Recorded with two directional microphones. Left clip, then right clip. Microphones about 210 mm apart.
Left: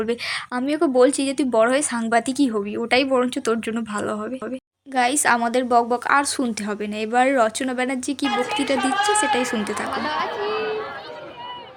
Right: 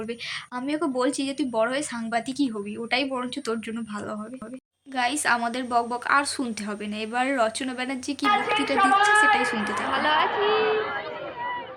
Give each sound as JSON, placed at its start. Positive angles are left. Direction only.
{"t": 0.0, "sound": "a woman's voice", "side_deg": 35}
{"t": 0.6, "sound": "a woman's voice", "side_deg": 25}
{"t": 9.9, "sound": "a woman's voice", "side_deg": 10}